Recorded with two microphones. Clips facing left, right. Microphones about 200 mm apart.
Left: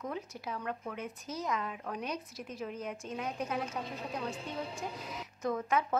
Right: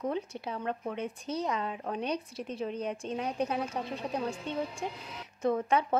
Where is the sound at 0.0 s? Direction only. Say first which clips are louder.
Right 6 dB; 30° right (ahead or behind).